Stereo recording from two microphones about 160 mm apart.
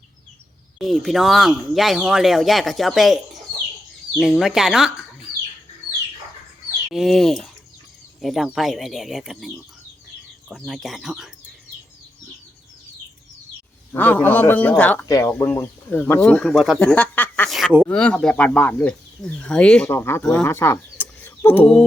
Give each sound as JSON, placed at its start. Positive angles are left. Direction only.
{"t": 0.8, "sound": "speech", "side_deg": 0}
{"t": 6.9, "sound": "speech", "side_deg": 0}
{"t": 10.7, "sound": "speech", "side_deg": 0}
{"t": 13.9, "sound": "speech", "side_deg": 10}
{"t": 15.0, "sound": "speech", "side_deg": 20}